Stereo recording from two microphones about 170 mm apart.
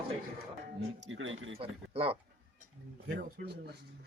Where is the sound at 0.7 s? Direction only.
90° right.